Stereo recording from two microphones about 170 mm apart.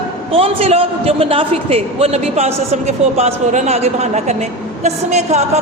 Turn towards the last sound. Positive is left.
turn(degrees=-40)  # may be behind; listen again after turning